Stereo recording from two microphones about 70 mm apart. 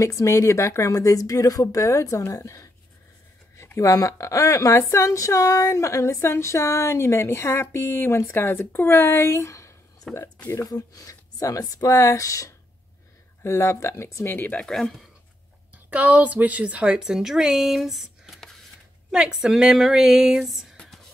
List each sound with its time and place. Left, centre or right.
0.0 s speech: left
3.7 s speech: left
14.2 s speech: left
14.6 s speech: centre
15.9 s a woman's voice: right; by 20.7 s centre
20.8 s whispering: centre